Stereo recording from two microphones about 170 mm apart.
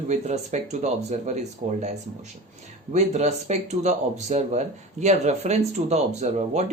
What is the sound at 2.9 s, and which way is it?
Speech, 40° right (ahead or behind).